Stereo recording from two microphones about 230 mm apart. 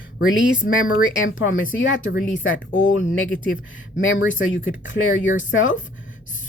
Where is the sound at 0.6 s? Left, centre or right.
Left.